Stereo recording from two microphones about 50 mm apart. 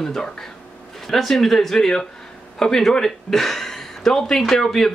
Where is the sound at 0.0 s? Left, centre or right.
Centre.